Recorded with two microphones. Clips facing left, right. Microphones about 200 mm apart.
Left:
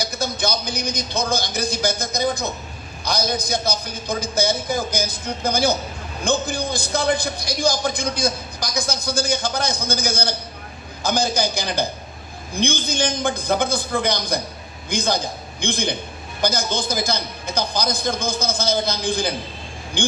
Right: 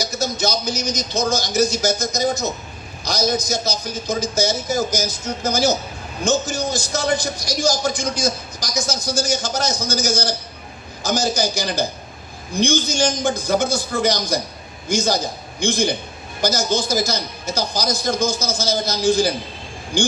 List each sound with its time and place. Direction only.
0.0 s a man's voice: 55° left (ahead or behind)